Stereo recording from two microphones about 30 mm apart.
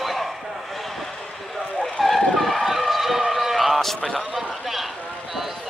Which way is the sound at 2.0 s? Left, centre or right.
Centre.